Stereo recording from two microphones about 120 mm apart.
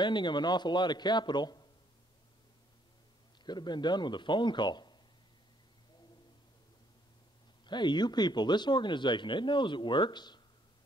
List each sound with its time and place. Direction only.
0.0 s speech: 40° left (ahead or behind)
3.4 s speech: 35° left (ahead or behind)
7.6 s speech: 40° left (ahead or behind)